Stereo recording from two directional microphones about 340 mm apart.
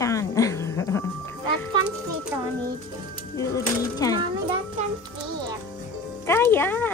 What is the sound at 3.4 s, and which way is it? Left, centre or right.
Speech, centre.